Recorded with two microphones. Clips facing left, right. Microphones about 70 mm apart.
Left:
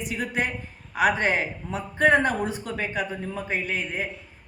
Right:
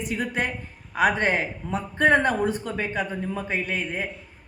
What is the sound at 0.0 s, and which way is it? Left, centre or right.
A woman's voice, right.